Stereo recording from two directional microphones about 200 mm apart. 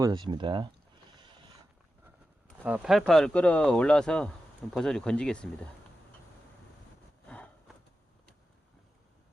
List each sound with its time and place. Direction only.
0.0 s speech: 20° right (ahead or behind)
1.1 s boat: 25° right (ahead or behind)
2.6 s speech: 5° right (ahead or behind)
7.3 s vehicle: 5° left (ahead or behind)